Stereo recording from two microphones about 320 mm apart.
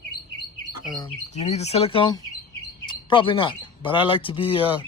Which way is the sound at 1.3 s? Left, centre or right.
Centre.